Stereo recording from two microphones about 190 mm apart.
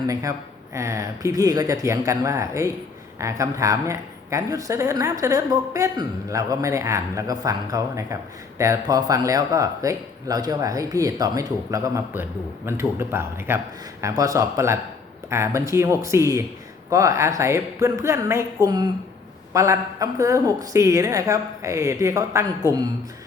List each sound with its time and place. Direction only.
0.1 s a woman's voice: 15° right (ahead or behind)